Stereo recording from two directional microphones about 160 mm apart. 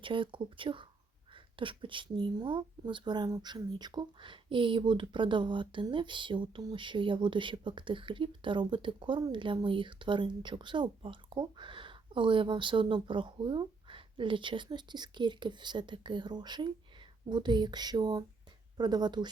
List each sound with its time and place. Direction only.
0.0 s speech: 30° right (ahead or behind)